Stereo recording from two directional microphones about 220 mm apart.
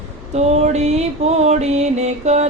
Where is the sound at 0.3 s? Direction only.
30° right (ahead or behind).